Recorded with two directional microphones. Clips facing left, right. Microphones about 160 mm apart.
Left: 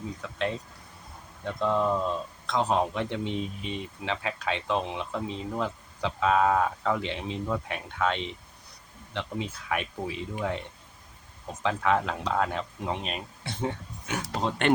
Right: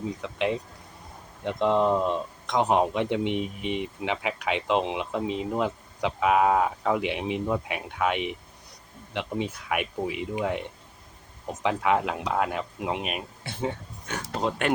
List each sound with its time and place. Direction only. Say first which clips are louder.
0.2 s speech: right 2 dB; 15° right (ahead or behind)